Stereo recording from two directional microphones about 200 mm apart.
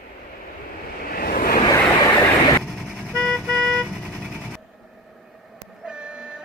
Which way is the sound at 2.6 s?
Centre (ahead or behind).